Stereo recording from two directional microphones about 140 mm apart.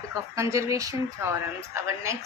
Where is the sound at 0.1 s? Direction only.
20° right (ahead or behind).